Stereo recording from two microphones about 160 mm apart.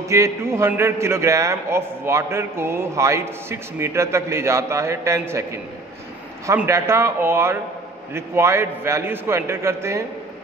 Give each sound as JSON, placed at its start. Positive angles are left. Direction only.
{"t": 0.0, "sound": "a man's voice", "side_deg": -20}